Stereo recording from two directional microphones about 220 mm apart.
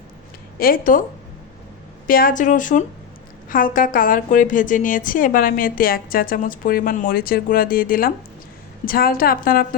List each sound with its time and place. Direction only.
0.6 s a woman's voice: 40° left (ahead or behind)
2.0 s a woman's voice: 40° left (ahead or behind)